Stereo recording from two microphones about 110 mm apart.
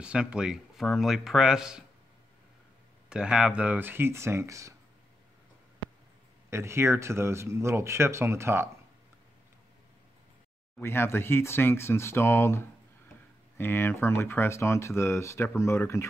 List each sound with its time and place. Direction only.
0.0 s speech: 10° right (ahead or behind)
3.1 s speech: 5° right (ahead or behind); by 4.7 s 30° right (ahead or behind)
6.5 s speech: 25° right (ahead or behind)
10.8 s speech: 20° left (ahead or behind)